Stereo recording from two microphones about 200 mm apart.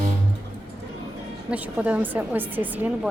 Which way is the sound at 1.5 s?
5° right (ahead or behind).